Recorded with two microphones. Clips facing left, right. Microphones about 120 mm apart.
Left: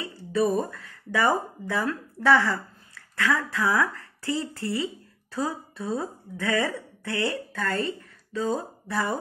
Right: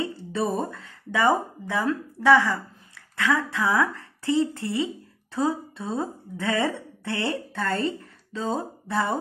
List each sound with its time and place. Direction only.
0.0 s speech: 25° right (ahead or behind)